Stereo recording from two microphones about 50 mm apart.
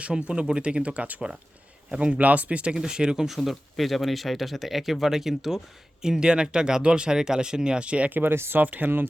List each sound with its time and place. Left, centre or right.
0.0 s speech: right
2.7 s speech: centre
3.2 s speech: centre; by 8.1 s right
8.1 s speech: right
8.6 s speech: right